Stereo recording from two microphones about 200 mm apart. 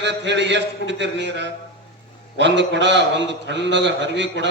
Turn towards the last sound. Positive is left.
turn(degrees=-65)  # may be behind; listen again after turning